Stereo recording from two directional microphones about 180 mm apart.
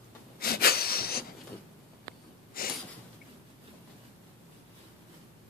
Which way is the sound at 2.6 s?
55° left (ahead or behind).